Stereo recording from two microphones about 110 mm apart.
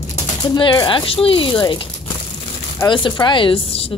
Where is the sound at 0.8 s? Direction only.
55° left (ahead or behind).